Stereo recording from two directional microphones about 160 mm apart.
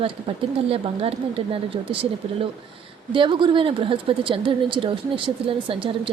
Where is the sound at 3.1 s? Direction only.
30° right (ahead or behind).